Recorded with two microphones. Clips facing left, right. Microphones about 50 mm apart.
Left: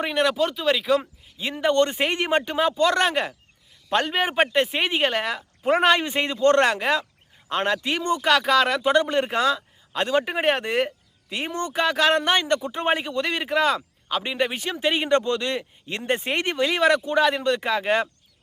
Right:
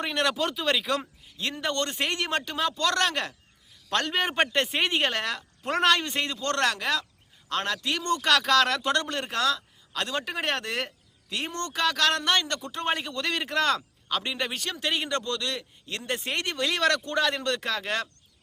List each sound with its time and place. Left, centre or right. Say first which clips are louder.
0.0 s a man's voice: left 5 dB; centre